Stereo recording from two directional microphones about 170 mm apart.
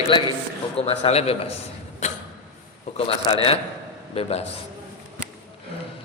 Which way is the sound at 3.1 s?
35° left (ahead or behind).